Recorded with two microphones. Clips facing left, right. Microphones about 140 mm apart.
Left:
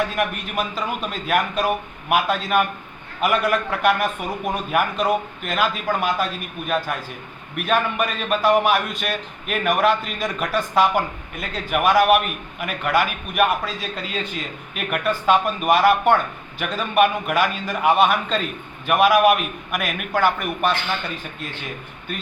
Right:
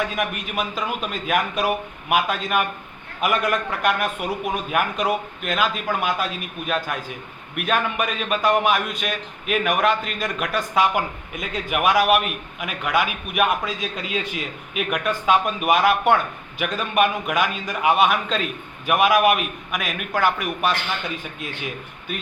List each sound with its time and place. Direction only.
0.2 s a man's voice: centre (ahead or behind)